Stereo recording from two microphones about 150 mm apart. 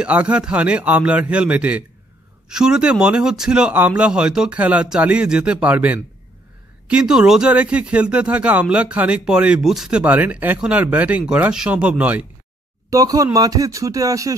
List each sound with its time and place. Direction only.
0.0 s speech: 10° right (ahead or behind)
12.9 s speech: 25° right (ahead or behind)